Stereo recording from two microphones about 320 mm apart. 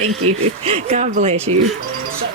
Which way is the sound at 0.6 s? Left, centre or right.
Centre.